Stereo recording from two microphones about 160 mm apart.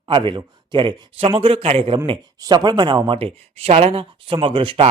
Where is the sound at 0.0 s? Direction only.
30° right (ahead or behind).